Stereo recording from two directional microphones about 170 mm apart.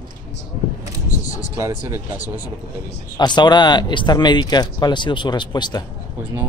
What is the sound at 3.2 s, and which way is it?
Speech, 25° left (ahead or behind).